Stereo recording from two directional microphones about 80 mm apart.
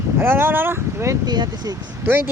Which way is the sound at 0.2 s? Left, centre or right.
Right.